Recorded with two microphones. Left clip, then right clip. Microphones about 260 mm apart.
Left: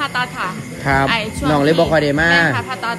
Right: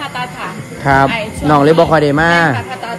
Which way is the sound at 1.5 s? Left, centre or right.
Right.